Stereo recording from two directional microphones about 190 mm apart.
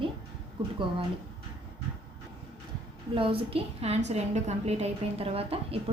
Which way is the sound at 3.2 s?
30° right (ahead or behind).